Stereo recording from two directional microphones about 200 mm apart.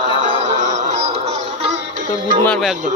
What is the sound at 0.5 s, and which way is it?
Music, 35° right (ahead or behind).